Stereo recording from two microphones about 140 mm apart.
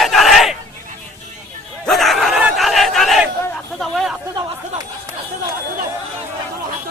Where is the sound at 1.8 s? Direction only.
Centre (ahead or behind).